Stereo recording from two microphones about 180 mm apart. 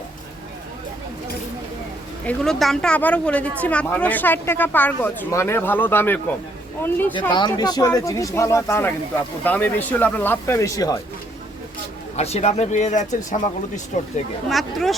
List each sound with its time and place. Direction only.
2.2 s speech: centre (ahead or behind)
7.2 s speech: 25° left (ahead or behind)
12.1 s speech: 35° left (ahead or behind)
14.5 s speech: centre (ahead or behind)